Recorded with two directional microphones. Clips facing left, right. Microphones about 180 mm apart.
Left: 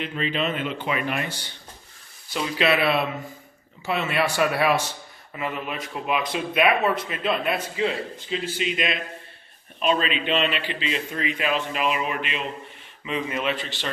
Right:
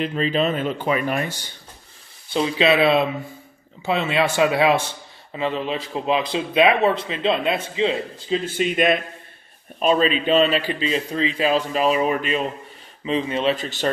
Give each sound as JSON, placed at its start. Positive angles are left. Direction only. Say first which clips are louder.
{"t": 0.0, "sound": "a man's voice", "louder": "right 5 dB", "side_deg": -40}
{"t": 2.3, "sound": "speech", "louder": "right 5 dB", "side_deg": -25}
{"t": 8.5, "sound": "speech", "louder": "right 8 dB", "side_deg": -50}
{"t": 9.8, "sound": "a man's voice", "louder": "right 5 dB", "side_deg": -40}
{"t": 13.6, "sound": "speech", "louder": "right 4 dB", "side_deg": -45}